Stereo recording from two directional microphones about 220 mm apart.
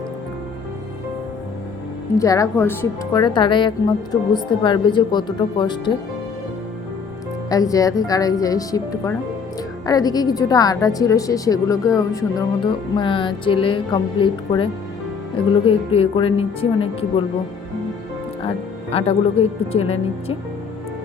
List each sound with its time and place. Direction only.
2.1 s a woman's voice: 15° left (ahead or behind)
7.5 s a woman's voice: 15° left (ahead or behind)
18.4 s a woman's voice: 25° left (ahead or behind)